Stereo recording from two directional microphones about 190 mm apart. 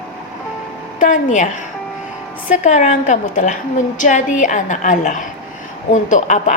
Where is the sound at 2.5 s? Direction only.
40° left (ahead or behind).